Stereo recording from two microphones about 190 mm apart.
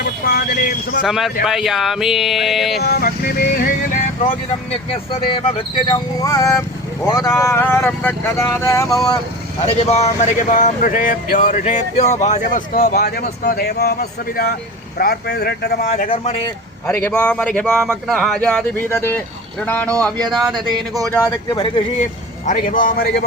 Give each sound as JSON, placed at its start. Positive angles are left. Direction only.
{"t": 0.0, "sound": "speech", "side_deg": 55}
{"t": 1.0, "sound": "speech", "side_deg": 0}
{"t": 2.8, "sound": "speech", "side_deg": 55}
{"t": 5.1, "sound": "speech", "side_deg": 30}
{"t": 9.6, "sound": "speech", "side_deg": 30}
{"t": 15.8, "sound": "speech", "side_deg": 35}
{"t": 16.8, "sound": "speech", "side_deg": 10}
{"t": 21.1, "sound": "speech", "side_deg": 10}
{"t": 22.4, "sound": "speech", "side_deg": 45}